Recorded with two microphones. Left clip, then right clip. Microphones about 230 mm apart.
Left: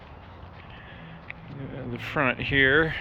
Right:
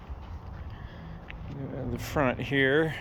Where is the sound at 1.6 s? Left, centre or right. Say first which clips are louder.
Left 1 dB; centre.